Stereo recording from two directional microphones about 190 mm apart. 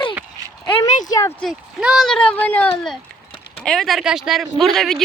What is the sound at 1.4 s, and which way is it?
Speech, centre (ahead or behind).